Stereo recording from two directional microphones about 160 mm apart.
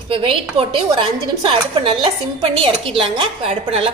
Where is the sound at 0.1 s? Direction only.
35° right (ahead or behind).